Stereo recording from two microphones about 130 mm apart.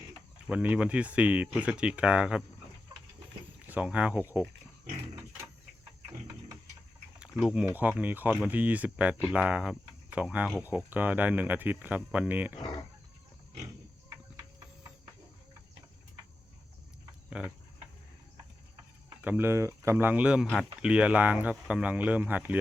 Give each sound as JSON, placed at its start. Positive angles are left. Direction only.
{"t": 0.4, "sound": "speech", "side_deg": -10}
{"t": 3.7, "sound": "speech", "side_deg": -10}
{"t": 7.2, "sound": "speech", "side_deg": -10}
{"t": 17.2, "sound": "a sound", "side_deg": -5}
{"t": 19.2, "sound": "speech", "side_deg": -15}